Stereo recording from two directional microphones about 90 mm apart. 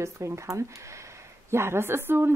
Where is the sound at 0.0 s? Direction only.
35° right (ahead or behind).